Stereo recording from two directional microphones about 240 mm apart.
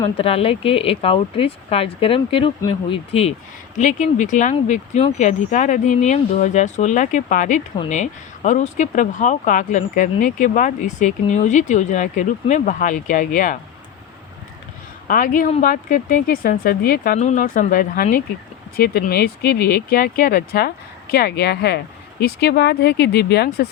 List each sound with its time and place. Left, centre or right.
0.0 s speech: left
15.0 s speech: left